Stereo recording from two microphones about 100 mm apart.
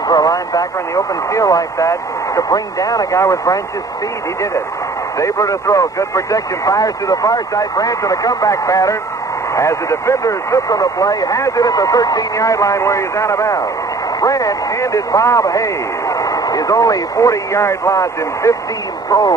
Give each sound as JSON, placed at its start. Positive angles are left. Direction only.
{"t": 0.1, "sound": "speech", "side_deg": 40}
{"t": 5.1, "sound": "speech", "side_deg": 30}